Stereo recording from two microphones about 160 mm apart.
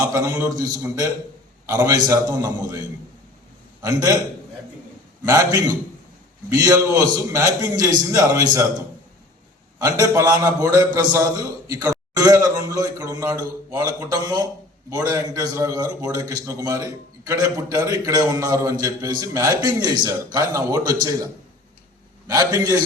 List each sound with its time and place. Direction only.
0.1 s a man's voice: 20° right (ahead or behind)
3.8 s a man's voice: 20° right (ahead or behind)
5.2 s a man's voice: 20° right (ahead or behind)
9.7 s a man's voice: 20° right (ahead or behind)
22.3 s a man's voice: 20° right (ahead or behind)